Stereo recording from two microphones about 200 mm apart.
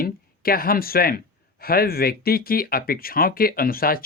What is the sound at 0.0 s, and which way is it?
Speech, 50° left (ahead or behind).